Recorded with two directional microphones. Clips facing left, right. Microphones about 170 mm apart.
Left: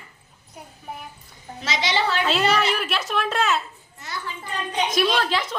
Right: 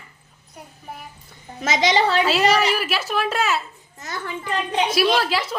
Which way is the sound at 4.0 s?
50° right (ahead or behind).